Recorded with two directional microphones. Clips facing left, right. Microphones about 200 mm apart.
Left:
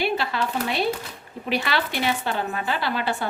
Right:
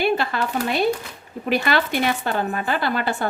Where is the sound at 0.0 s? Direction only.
50° right (ahead or behind).